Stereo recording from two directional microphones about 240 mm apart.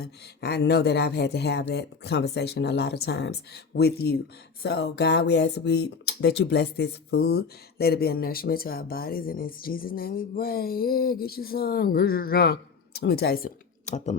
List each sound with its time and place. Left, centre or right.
0.0 s speech: left